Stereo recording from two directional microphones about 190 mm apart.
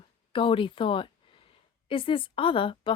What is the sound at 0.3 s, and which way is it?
A woman's voice, 25° left (ahead or behind).